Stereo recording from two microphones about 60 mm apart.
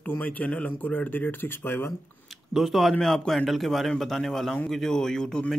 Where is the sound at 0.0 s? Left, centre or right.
Left.